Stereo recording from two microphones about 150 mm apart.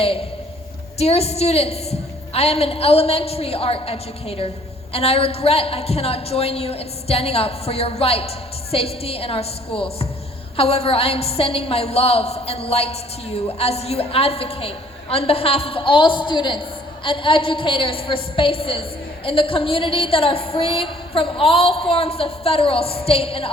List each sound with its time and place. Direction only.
0.9 s a woman's voice: 45° left (ahead or behind)